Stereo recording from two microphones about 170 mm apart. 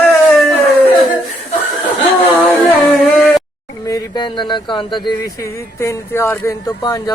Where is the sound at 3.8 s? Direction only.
25° left (ahead or behind).